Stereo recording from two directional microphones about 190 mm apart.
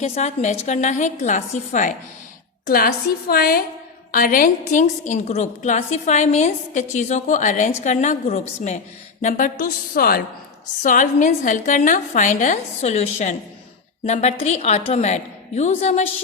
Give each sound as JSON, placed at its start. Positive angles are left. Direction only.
{"t": 0.0, "sound": "a woman's voice", "side_deg": 35}
{"t": 2.6, "sound": "a woman's voice", "side_deg": 50}